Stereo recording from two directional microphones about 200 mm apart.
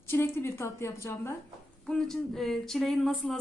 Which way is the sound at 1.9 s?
Centre (ahead or behind).